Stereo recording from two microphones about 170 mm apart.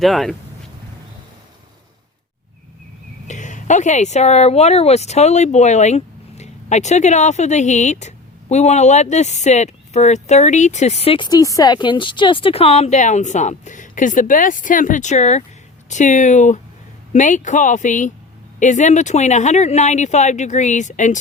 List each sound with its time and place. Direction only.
0.0 s speech: centre (ahead or behind)
3.2 s speech: 45° left (ahead or behind)